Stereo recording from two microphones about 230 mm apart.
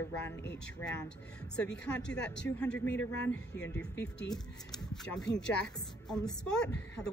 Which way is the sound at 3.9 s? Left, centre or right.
Left.